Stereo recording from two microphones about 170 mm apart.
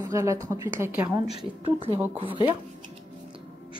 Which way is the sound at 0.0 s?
15° right (ahead or behind).